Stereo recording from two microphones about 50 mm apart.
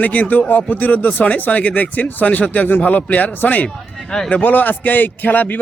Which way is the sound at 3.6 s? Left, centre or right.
Centre.